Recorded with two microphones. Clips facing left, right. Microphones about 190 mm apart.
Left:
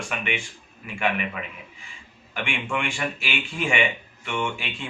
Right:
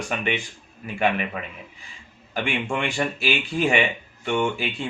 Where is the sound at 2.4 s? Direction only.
35° right (ahead or behind).